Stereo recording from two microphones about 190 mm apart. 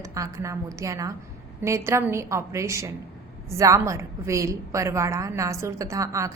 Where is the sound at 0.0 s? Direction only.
15° right (ahead or behind).